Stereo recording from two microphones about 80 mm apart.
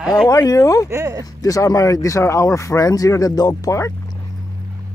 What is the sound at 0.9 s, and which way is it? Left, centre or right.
Speech, right.